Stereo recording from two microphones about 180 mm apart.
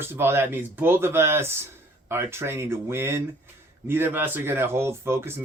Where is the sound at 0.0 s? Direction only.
10° right (ahead or behind).